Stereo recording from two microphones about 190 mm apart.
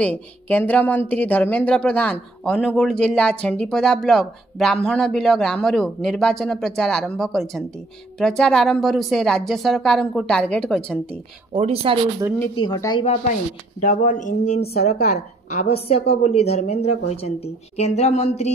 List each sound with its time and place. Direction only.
0.0 s speech: 10° left (ahead or behind)
11.5 s speech: 30° right (ahead or behind)
12.5 s speech: 20° left (ahead or behind)
13.0 s a woman's voice: 35° left (ahead or behind)